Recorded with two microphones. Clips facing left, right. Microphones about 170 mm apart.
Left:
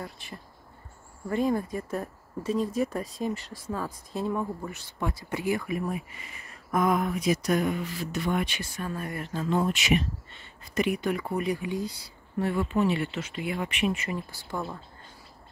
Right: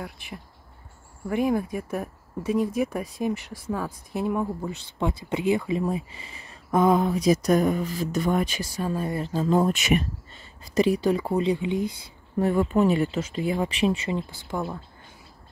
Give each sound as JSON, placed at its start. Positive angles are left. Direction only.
{"t": 1.3, "sound": "speech", "side_deg": -10}
{"t": 10.8, "sound": "speech", "side_deg": -35}
{"t": 12.4, "sound": "speech", "side_deg": -45}
{"t": 14.0, "sound": "speech", "side_deg": -20}